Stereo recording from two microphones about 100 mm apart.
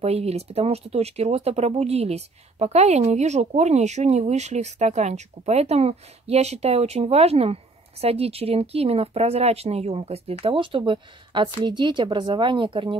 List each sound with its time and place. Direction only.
0.0 s speech: 90° right
10.4 s speech: 60° right (ahead or behind)
10.9 s speech: 50° right (ahead or behind)